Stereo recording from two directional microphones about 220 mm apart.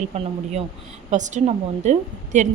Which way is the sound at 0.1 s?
30° right (ahead or behind).